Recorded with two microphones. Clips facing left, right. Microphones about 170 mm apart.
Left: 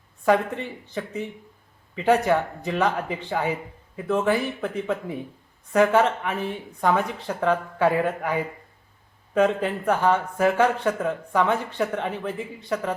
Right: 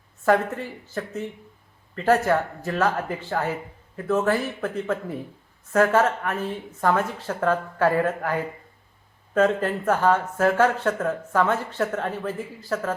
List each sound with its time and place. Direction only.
0.2 s speech: centre (ahead or behind)